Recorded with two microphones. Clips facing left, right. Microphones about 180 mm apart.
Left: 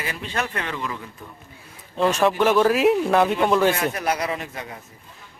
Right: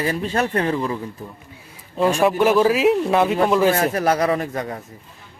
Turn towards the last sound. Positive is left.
turn(degrees=-45)  # may be behind; listen again after turning